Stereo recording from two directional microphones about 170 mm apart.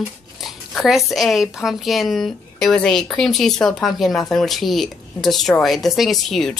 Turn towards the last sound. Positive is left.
turn(degrees=0)  # may be behind; listen again after turning